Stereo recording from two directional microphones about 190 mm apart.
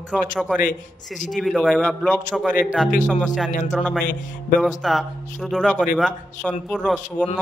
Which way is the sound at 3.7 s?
5° left (ahead or behind).